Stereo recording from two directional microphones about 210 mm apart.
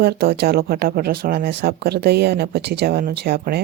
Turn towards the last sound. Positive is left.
turn(degrees=-50)  # may be behind; listen again after turning